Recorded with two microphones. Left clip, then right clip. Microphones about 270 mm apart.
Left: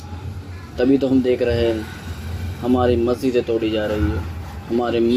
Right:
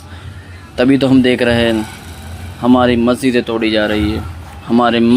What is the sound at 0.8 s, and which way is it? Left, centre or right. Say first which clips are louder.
Speech: right 6 dB; right.